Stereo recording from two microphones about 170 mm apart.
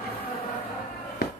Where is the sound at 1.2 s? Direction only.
75° left (ahead or behind).